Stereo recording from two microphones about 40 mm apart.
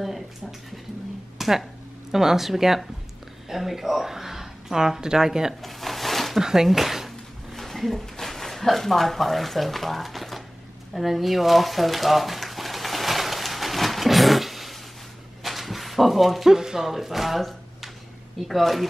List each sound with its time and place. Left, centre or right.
0.0 s speech: centre
5.6 s a sound: centre
6.4 s speech: centre
7.5 s speech: centre
11.0 s a sound: centre
16.5 s speech: centre